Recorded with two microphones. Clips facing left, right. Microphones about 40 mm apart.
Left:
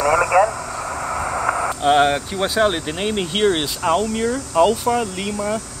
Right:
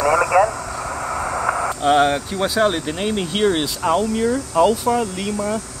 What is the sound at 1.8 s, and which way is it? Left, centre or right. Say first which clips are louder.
Speech: even; left.